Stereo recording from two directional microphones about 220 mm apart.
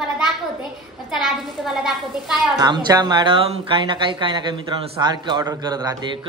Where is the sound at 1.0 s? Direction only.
Centre (ahead or behind).